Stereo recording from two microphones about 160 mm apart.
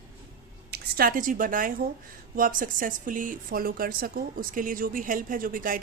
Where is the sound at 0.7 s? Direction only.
65° right (ahead or behind).